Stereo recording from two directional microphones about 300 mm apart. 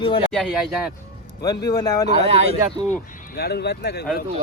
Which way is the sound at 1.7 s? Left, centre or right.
Centre.